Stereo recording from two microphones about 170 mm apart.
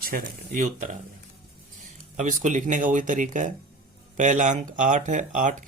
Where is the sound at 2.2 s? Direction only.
50° right (ahead or behind).